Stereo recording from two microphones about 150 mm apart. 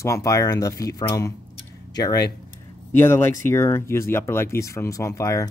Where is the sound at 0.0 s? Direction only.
20° left (ahead or behind).